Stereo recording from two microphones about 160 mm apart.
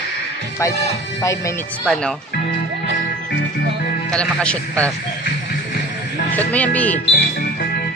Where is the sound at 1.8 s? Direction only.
5° left (ahead or behind).